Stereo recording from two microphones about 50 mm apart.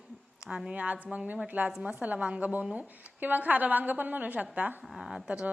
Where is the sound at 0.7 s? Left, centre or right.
Right.